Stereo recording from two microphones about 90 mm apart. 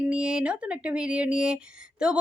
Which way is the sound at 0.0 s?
10° right (ahead or behind).